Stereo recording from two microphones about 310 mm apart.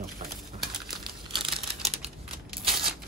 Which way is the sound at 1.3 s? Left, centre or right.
Centre.